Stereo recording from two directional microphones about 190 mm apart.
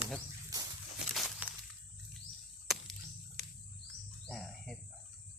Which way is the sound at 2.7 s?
Centre (ahead or behind).